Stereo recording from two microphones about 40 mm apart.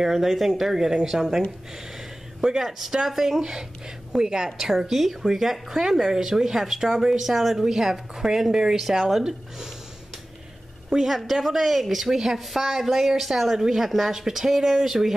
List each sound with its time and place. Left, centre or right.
0.0 s speech: centre
2.4 s speech: centre
10.9 s speech: centre